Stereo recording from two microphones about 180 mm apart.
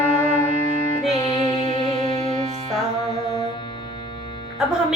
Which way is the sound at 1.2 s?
30° left (ahead or behind).